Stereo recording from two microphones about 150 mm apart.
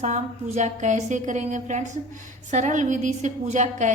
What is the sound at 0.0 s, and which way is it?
A woman's voice, 50° right (ahead or behind).